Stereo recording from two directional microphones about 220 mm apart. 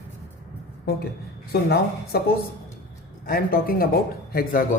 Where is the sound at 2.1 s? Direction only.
45° left (ahead or behind).